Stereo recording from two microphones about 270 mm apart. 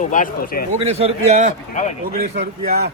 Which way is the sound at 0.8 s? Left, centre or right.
Right.